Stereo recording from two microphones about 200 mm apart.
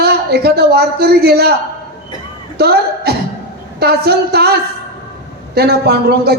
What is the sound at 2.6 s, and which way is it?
A man's voice, 55° right (ahead or behind).